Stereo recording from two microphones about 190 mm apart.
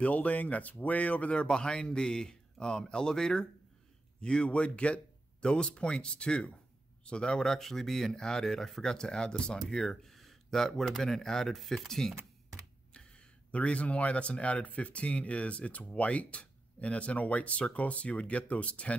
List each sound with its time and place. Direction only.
0.0 s speech: 5° left (ahead or behind)